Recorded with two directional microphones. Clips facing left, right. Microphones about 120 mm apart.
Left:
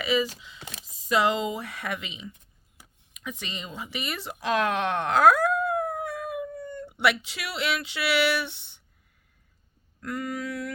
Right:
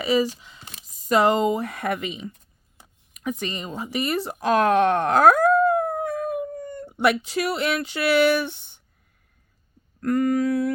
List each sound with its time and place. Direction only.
0.0 s speech: 40° right (ahead or behind)
10.0 s speech: 45° right (ahead or behind)